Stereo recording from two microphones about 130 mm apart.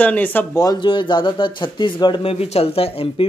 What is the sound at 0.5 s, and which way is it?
Speech, 30° left (ahead or behind).